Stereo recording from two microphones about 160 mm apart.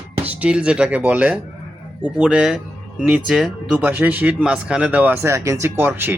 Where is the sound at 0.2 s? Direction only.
10° right (ahead or behind).